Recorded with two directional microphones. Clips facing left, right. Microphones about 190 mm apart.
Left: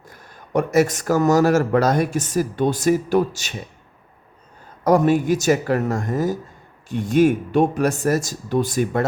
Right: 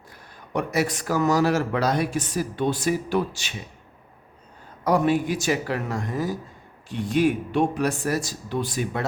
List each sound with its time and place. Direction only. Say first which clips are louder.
0.1 s speech: left 6 dB; 45° left (ahead or behind)
4.8 s speech: left 5 dB; 45° left (ahead or behind)